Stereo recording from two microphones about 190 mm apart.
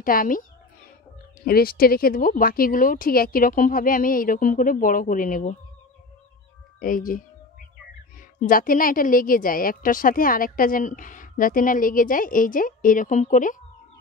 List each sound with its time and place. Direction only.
0.0 s a woman's voice: 45° left (ahead or behind)
6.8 s a woman's voice: 45° left (ahead or behind)
8.4 s a woman's voice: 45° left (ahead or behind)